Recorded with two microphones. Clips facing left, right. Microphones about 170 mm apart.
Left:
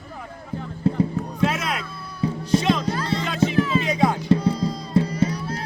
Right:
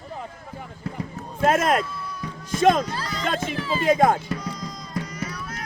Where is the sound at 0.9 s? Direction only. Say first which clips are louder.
Left 12 dB; 30° left (ahead or behind).